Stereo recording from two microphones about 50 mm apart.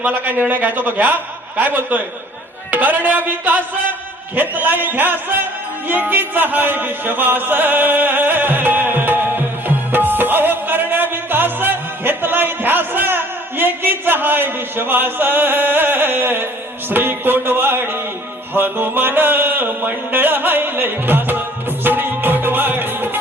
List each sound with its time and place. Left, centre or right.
0.1 s speech: right
5.9 s music: right
16.9 s a sound: right
21.8 s music: right